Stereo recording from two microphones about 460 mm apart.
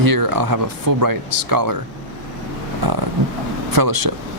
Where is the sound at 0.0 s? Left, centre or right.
Right.